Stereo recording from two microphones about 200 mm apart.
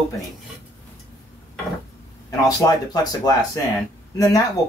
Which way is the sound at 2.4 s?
20° left (ahead or behind).